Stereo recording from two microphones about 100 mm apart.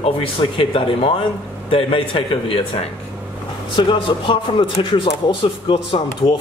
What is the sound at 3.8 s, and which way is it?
Speech, 55° left (ahead or behind).